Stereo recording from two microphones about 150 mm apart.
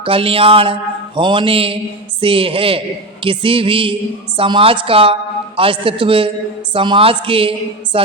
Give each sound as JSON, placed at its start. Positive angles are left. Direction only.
{"t": 0.0, "sound": "mantra", "side_deg": -40}